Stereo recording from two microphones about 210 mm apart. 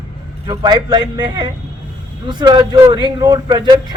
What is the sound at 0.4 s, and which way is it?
Speech, 20° right (ahead or behind).